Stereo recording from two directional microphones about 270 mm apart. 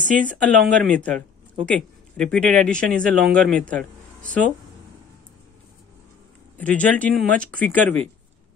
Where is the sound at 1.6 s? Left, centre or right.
Centre.